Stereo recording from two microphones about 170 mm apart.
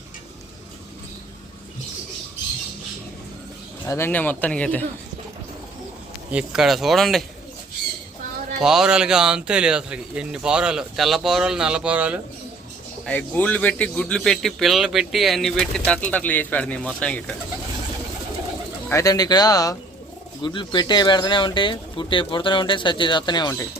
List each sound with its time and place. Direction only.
3.8 s speech: 15° left (ahead or behind)
6.3 s speech: 5° right (ahead or behind)
8.6 s speech: 5° right (ahead or behind)
13.1 s speech: 10° left (ahead or behind)
18.9 s speech: 20° left (ahead or behind)